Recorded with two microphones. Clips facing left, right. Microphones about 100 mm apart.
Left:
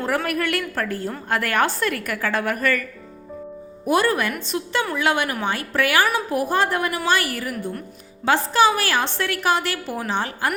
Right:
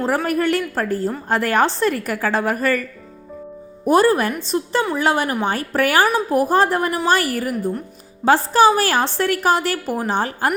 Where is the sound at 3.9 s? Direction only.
35° right (ahead or behind).